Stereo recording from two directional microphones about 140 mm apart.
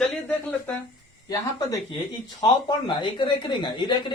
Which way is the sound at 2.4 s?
35° left (ahead or behind).